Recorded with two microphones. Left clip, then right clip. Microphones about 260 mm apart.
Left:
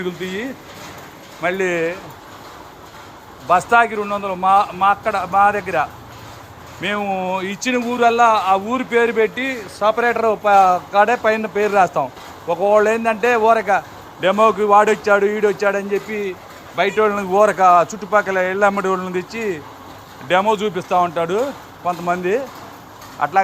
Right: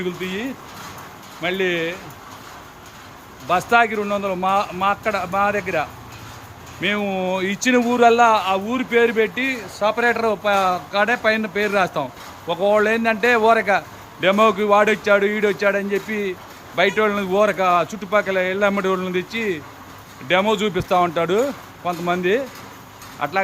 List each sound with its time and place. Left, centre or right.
0.0 s speech: centre
1.6 s speech: centre
3.4 s speech: centre